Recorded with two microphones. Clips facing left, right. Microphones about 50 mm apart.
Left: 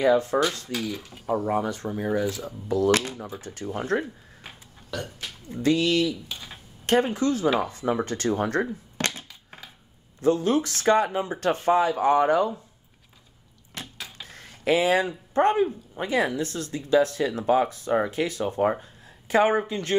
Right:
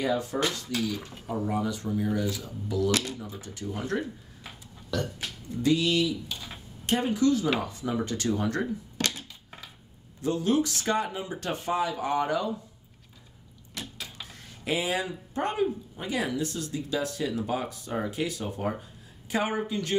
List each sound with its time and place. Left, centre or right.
0.0 s speech: left
4.9 s speech: centre
5.6 s speech: left
10.2 s speech: left
13.7 s a sound: left
14.6 s speech: left